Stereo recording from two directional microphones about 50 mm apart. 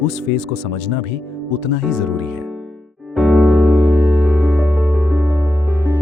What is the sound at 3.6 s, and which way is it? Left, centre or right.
Music, right.